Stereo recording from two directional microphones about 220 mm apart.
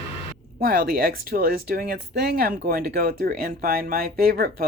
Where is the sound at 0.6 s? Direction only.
40° right (ahead or behind).